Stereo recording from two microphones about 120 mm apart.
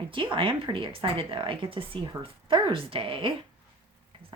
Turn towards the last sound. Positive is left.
turn(degrees=-45)  # may be behind; listen again after turning